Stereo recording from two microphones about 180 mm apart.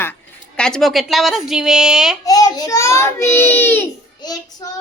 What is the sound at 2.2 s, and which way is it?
A woman's voice, 20° left (ahead or behind).